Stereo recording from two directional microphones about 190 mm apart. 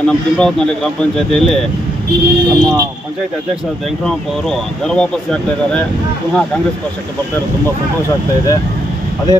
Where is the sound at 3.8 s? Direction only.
Centre (ahead or behind).